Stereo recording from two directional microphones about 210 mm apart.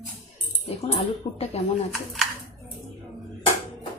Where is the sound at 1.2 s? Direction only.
30° left (ahead or behind).